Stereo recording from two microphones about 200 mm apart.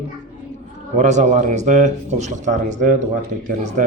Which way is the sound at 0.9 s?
35° right (ahead or behind).